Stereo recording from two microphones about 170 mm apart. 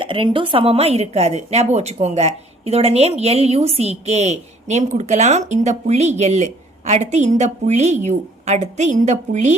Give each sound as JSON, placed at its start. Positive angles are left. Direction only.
{"t": 0.0, "sound": "a woman's voice", "side_deg": -30}